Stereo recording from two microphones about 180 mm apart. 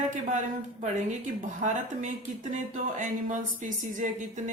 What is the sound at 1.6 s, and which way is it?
Speech, 40° right (ahead or behind).